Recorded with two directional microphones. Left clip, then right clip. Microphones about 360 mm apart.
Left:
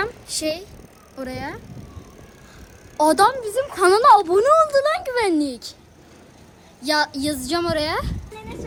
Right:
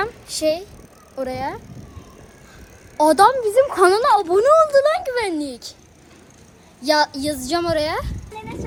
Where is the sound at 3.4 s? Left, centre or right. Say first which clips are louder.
Right 8 dB; centre.